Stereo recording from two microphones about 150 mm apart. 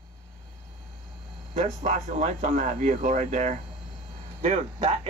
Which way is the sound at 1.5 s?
50° right (ahead or behind).